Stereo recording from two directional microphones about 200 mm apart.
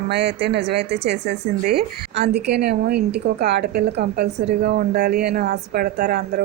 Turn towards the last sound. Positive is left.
turn(degrees=-50)  # may be behind; listen again after turning